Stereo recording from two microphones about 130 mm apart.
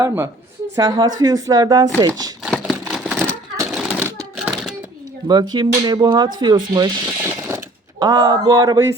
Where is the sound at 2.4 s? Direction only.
Centre (ahead or behind).